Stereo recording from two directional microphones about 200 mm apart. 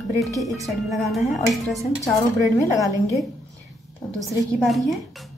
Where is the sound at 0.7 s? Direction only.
Centre (ahead or behind).